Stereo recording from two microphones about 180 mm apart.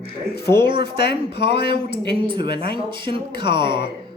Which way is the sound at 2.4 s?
65° left (ahead or behind).